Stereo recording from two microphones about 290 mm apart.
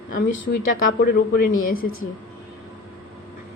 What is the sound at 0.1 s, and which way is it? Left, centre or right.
A woman's voice, left.